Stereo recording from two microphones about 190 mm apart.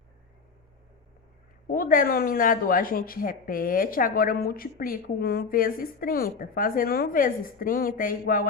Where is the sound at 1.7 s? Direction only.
45° left (ahead or behind).